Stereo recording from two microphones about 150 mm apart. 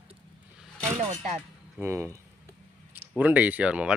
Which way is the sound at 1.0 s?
50° right (ahead or behind).